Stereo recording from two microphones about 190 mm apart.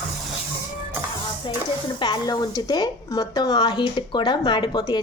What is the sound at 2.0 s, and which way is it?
A woman's voice, 20° left (ahead or behind).